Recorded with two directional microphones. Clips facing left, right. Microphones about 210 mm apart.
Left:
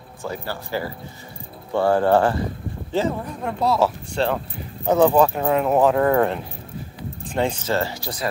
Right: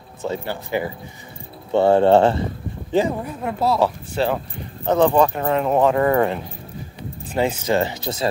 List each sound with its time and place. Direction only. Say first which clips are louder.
0.2 s speech: right 4 dB; 20° right (ahead or behind)
3.4 s speech: right 1 dB; centre (ahead or behind)
4.8 s speech: even; 10° left (ahead or behind)
7.7 s speech: right 3 dB; 20° right (ahead or behind)